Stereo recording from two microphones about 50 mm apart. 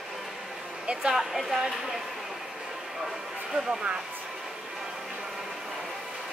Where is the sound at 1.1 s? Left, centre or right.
Centre.